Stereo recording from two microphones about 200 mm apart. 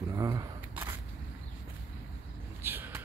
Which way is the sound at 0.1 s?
15° right (ahead or behind).